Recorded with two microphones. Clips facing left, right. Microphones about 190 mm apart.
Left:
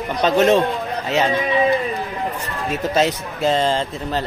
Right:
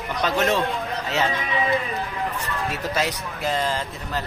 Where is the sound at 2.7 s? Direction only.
25° left (ahead or behind).